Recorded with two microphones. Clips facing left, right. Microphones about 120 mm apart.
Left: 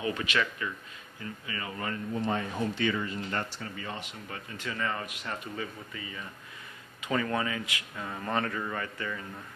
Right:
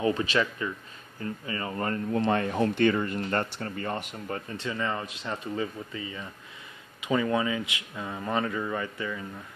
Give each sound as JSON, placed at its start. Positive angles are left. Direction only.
{"t": 0.0, "sound": "speech", "side_deg": -30}
{"t": 2.1, "sound": "speech", "side_deg": -70}
{"t": 4.6, "sound": "speech", "side_deg": -25}